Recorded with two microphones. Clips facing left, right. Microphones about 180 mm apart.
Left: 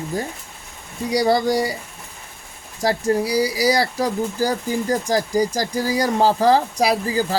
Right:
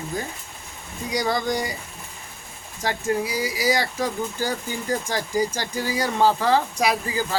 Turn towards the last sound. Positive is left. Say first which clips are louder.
# left 4 dB
turn(degrees=35)  # may be behind; listen again after turning